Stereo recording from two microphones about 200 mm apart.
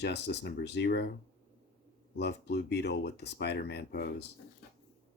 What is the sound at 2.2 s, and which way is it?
Speech, 55° left (ahead or behind).